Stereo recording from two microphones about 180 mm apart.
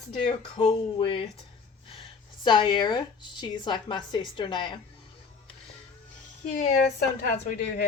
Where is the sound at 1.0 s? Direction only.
30° left (ahead or behind).